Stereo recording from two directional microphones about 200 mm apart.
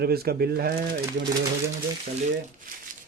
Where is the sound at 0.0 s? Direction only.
50° right (ahead or behind).